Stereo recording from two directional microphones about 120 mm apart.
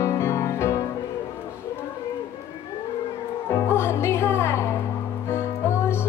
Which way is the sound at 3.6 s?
20° left (ahead or behind).